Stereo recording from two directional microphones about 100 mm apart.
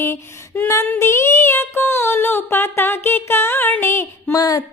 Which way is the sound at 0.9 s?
25° left (ahead or behind).